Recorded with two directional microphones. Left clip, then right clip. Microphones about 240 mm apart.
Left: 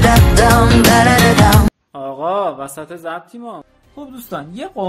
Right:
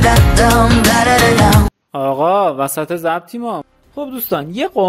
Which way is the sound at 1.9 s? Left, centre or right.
Right.